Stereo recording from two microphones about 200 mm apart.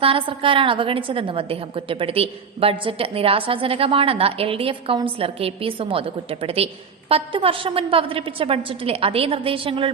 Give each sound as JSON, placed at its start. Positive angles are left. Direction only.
{"t": 0.0, "sound": "a woman's voice", "side_deg": -25}